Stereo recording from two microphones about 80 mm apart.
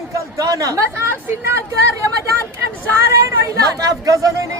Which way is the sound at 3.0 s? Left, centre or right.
Right.